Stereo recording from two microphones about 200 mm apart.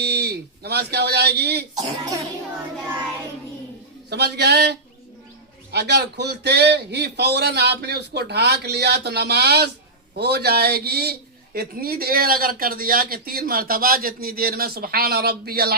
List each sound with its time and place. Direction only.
0.0 s speech: 55° right (ahead or behind)
4.1 s a man's voice: 55° right (ahead or behind)